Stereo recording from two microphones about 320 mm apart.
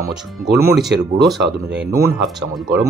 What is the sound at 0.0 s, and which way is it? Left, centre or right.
Speech, centre.